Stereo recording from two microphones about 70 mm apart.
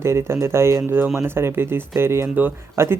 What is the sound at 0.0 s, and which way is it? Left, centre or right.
Speech, right.